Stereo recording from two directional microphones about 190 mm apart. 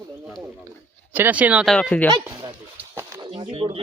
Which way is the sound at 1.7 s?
10° left (ahead or behind).